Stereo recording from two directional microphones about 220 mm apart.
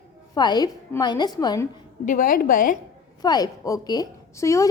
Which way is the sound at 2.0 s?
40° left (ahead or behind).